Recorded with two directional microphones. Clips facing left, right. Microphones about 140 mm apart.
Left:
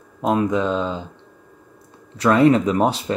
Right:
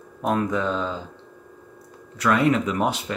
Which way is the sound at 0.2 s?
20° left (ahead or behind).